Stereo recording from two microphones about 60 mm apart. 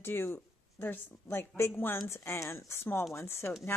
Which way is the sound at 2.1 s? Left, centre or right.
Left.